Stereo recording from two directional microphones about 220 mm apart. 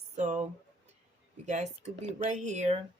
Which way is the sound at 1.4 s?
30° right (ahead or behind).